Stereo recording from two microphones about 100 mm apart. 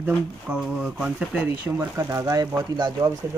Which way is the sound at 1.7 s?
25° right (ahead or behind).